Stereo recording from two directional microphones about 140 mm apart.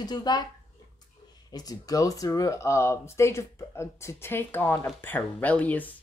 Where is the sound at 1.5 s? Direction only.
25° left (ahead or behind); by 5.9 s 10° left (ahead or behind).